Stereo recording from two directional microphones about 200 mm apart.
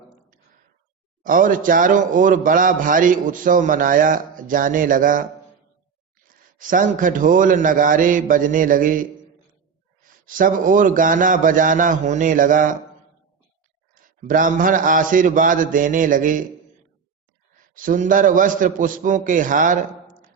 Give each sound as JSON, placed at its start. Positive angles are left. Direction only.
{"t": 1.2, "sound": "speech", "side_deg": -45}
{"t": 6.2, "sound": "speech", "side_deg": -40}
{"t": 13.9, "sound": "speech", "side_deg": -40}
{"t": 17.7, "sound": "speech", "side_deg": -40}